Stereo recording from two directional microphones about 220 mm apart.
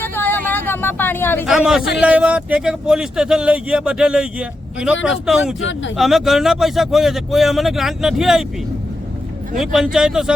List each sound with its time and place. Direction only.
0.0 s vehicle: 10° left (ahead or behind)
1.5 s speech: centre (ahead or behind)
5.5 s speech: 60° left (ahead or behind)
6.0 s speech: centre (ahead or behind)
9.6 s speech: centre (ahead or behind)